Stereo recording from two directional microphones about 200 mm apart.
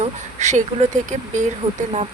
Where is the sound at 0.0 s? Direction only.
35° right (ahead or behind).